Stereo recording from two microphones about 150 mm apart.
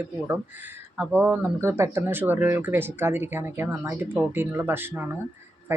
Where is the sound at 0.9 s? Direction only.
10° right (ahead or behind).